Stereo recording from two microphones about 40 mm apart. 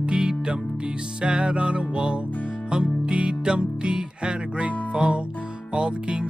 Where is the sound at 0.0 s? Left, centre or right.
Right.